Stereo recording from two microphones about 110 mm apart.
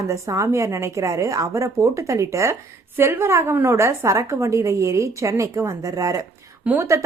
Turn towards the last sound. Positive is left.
turn(degrees=-15)  # may be behind; listen again after turning